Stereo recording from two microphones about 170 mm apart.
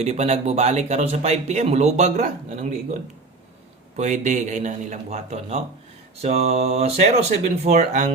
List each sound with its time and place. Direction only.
0.0 s a man's voice: 40° right (ahead or behind)